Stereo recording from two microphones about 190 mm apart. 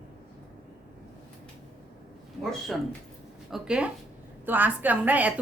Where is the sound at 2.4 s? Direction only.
Centre (ahead or behind).